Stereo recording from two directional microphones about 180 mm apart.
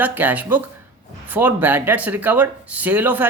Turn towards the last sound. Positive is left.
turn(degrees=-10)  # may be behind; listen again after turning